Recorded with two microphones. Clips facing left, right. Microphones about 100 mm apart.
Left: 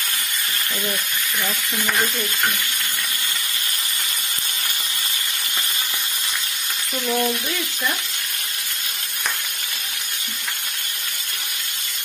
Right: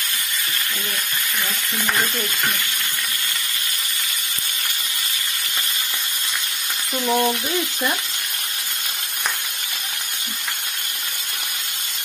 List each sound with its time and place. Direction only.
7.1 s frying: 25° right (ahead or behind)